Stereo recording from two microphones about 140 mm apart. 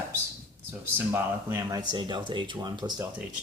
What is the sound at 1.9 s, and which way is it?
Speech, 35° right (ahead or behind).